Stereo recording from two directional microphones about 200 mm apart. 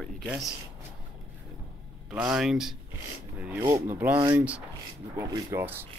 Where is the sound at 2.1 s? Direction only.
5° right (ahead or behind).